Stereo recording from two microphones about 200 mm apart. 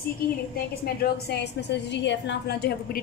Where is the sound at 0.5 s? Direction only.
50° left (ahead or behind).